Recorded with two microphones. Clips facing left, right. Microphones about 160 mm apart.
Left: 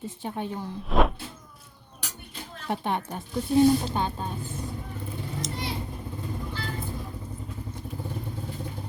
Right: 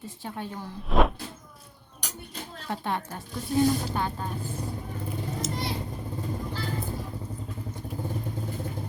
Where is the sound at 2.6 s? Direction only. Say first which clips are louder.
Left 3 dB; 20° left (ahead or behind).